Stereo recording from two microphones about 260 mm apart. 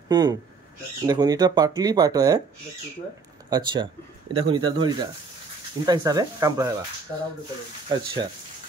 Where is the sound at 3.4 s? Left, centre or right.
Centre.